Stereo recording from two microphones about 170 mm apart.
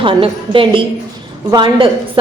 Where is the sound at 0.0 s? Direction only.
30° right (ahead or behind).